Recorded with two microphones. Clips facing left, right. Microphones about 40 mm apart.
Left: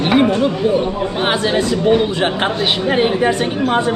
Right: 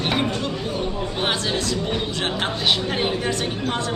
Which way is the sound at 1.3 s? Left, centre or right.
Left.